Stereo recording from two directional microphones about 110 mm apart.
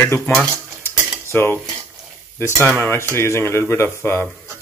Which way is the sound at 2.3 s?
20° left (ahead or behind).